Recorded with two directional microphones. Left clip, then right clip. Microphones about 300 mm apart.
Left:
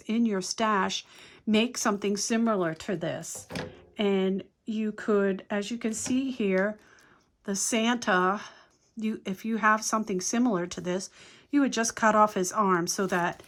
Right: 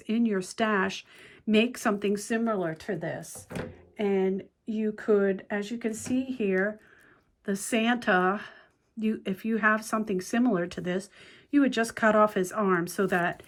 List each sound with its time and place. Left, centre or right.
0.0 s speech: centre